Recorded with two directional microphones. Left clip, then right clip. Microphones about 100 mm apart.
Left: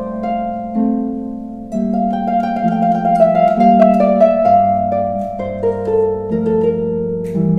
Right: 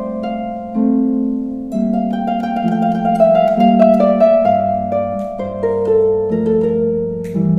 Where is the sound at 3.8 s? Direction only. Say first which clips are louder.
Even; 15° right (ahead or behind).